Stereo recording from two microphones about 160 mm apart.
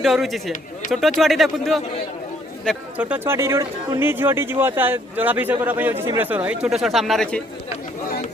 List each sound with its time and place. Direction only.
0.0 s speech: centre (ahead or behind)
3.0 s speech: 10° right (ahead or behind); by 7.4 s 5° left (ahead or behind)